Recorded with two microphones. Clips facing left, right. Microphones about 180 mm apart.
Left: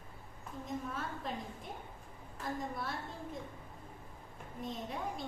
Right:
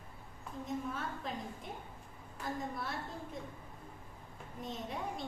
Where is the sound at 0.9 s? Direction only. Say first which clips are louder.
Even; centre (ahead or behind).